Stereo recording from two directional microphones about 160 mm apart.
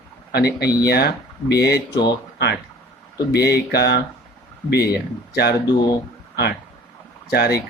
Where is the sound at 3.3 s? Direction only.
90° left.